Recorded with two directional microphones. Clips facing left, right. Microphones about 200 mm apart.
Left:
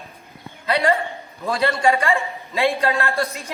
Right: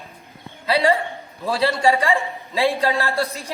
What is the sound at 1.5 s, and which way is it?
A woman's voice, 30° right (ahead or behind).